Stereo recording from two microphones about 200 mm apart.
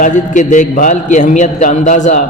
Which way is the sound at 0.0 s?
40° left (ahead or behind).